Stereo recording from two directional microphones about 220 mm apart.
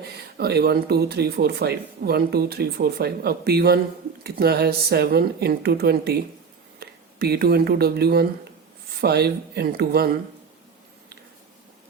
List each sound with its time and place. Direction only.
0.3 s speech: 45° right (ahead or behind)